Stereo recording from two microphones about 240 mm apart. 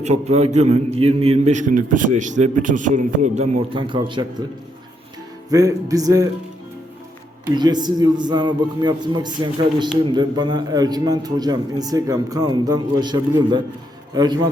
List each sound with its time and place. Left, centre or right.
0.0 s a man's voice: right
5.5 s a man's voice: centre
7.5 s a man's voice: centre